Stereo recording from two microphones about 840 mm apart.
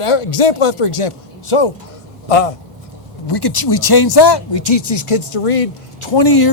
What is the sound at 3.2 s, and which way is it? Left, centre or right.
Speech, left.